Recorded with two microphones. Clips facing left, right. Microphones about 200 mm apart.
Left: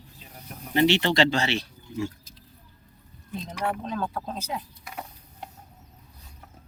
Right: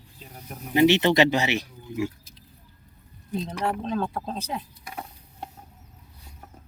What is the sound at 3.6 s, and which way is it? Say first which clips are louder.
Speech: right 1 dB; 30° right (ahead or behind).